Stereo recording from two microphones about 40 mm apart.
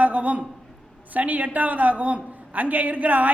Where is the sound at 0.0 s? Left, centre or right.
Right.